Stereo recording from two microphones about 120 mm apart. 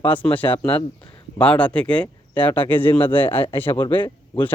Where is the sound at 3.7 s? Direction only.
45° left (ahead or behind).